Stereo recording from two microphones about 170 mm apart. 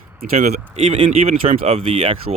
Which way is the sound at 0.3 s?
45° right (ahead or behind).